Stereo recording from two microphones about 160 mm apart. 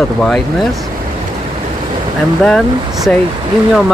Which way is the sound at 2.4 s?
5° left (ahead or behind).